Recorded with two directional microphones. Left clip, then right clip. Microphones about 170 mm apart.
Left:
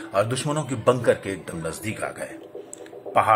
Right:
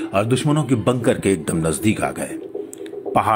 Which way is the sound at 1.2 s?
25° right (ahead or behind).